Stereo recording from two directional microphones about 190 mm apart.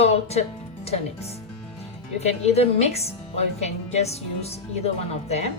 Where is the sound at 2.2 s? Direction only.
35° left (ahead or behind).